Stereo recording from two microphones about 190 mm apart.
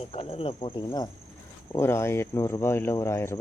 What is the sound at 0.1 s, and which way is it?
Speech, 30° left (ahead or behind).